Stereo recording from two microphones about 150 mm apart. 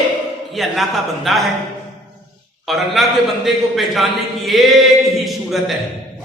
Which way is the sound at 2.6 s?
Centre (ahead or behind).